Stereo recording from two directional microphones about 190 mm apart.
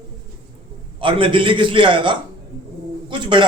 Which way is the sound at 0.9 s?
25° right (ahead or behind).